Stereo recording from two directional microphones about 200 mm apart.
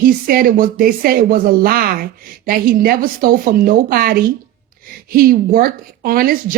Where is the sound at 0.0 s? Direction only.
45° right (ahead or behind).